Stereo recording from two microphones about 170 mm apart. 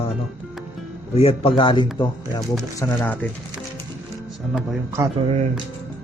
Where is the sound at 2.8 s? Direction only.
15° left (ahead or behind).